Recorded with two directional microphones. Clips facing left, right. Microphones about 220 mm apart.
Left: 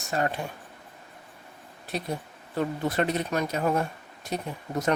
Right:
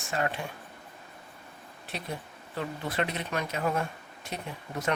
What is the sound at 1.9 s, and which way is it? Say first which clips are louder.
Speech: left 6 dB; 40° left (ahead or behind).